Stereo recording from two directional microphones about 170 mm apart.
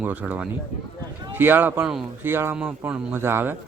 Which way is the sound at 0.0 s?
10° right (ahead or behind).